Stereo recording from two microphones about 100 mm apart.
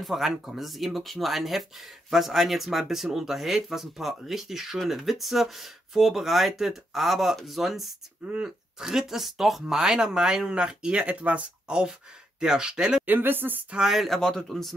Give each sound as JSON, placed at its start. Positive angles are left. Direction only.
{"t": 0.0, "sound": "speech", "side_deg": 0}
{"t": 13.1, "sound": "a woman's voice", "side_deg": -20}
{"t": 13.7, "sound": "speech", "side_deg": -5}